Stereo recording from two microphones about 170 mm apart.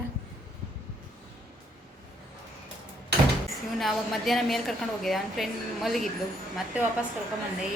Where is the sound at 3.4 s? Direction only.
Centre (ahead or behind).